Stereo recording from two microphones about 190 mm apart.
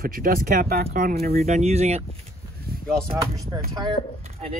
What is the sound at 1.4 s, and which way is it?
Speech, 35° right (ahead or behind).